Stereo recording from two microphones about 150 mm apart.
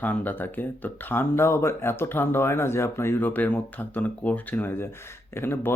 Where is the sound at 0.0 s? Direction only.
10° left (ahead or behind).